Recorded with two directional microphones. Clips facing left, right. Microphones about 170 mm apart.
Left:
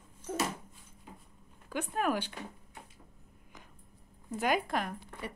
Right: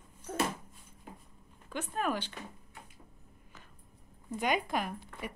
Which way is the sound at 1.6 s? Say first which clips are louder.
Left 2 dB; 10° left (ahead or behind).